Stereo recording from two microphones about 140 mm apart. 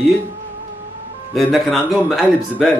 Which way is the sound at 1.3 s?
Centre (ahead or behind).